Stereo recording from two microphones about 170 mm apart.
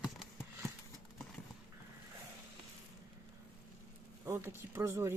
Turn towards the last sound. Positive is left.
turn(degrees=-15)  # may be behind; listen again after turning